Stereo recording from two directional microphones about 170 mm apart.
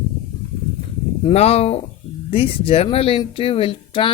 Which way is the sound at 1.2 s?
35° left (ahead or behind).